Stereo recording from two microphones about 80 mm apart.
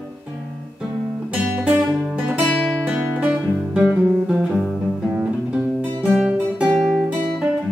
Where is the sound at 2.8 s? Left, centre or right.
Centre.